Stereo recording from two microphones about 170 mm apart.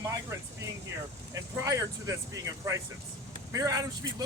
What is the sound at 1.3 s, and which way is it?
Speech, 20° right (ahead or behind).